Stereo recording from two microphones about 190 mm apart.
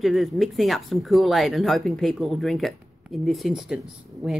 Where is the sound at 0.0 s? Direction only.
Centre (ahead or behind).